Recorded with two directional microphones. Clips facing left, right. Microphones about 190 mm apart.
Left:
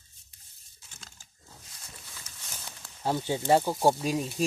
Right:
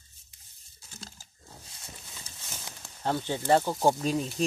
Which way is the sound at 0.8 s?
35° right (ahead or behind).